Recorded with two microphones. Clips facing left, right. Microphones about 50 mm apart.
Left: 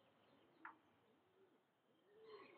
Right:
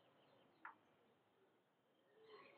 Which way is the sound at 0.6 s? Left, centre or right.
Centre.